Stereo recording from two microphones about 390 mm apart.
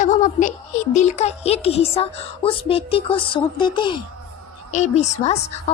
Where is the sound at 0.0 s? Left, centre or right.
Centre.